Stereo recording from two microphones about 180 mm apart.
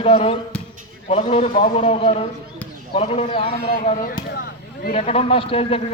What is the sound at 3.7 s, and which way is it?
Speech, 45° left (ahead or behind).